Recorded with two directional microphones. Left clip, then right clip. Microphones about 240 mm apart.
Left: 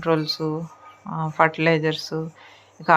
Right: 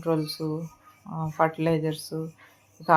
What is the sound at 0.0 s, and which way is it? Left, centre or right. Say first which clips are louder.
Speech: left 5 dB; centre.